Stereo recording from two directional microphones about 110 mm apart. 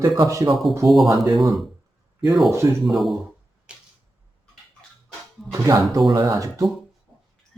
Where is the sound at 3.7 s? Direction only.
10° right (ahead or behind).